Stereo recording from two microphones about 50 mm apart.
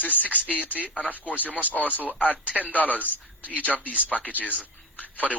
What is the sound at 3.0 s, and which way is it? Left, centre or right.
Speech, right.